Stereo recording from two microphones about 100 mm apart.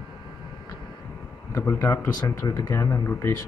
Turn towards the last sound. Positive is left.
turn(degrees=25)  # may be behind; listen again after turning